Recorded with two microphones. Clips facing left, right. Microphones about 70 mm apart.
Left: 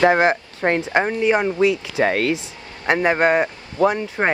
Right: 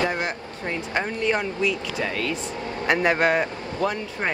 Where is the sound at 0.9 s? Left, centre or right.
Left.